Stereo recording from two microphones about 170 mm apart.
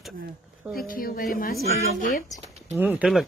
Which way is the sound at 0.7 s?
55° left (ahead or behind).